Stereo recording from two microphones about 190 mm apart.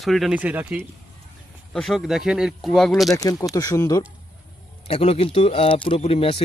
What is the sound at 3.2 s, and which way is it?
Speech, 20° left (ahead or behind).